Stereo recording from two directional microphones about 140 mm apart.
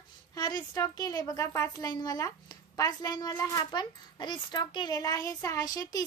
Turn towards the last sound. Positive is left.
turn(degrees=25)  # may be behind; listen again after turning